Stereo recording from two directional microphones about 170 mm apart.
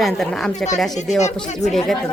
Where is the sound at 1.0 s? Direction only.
40° left (ahead or behind).